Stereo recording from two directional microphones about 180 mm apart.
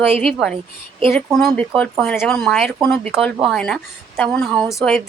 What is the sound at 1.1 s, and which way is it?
A woman's voice, centre (ahead or behind).